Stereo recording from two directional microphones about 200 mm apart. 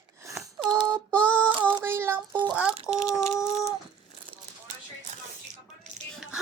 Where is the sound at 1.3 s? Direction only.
5° left (ahead or behind).